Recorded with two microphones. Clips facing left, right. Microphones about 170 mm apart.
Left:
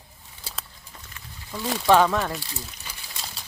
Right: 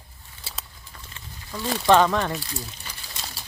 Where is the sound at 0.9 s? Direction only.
20° left (ahead or behind).